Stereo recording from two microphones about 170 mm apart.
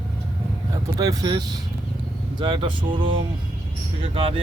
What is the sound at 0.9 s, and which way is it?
Speech, 20° right (ahead or behind).